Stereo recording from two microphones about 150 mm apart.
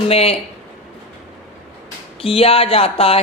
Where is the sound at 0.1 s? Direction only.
40° left (ahead or behind).